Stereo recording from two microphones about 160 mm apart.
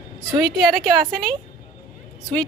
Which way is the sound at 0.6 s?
30° right (ahead or behind).